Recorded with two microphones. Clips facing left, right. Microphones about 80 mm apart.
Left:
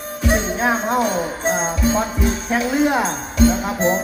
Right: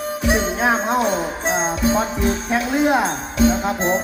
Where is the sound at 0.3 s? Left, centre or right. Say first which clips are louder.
Even; centre.